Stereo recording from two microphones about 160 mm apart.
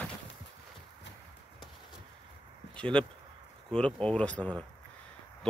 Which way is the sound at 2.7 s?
5° left (ahead or behind).